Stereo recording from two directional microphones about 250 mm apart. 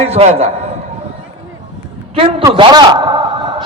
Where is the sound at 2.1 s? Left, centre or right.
Right.